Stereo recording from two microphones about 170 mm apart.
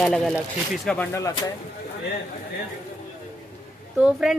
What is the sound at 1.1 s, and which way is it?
Speech, 20° left (ahead or behind).